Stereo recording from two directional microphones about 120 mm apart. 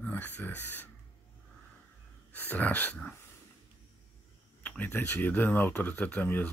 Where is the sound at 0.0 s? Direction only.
15° left (ahead or behind).